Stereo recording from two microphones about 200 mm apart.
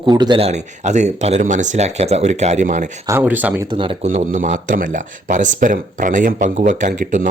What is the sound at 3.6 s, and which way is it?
Speech, 25° right (ahead or behind).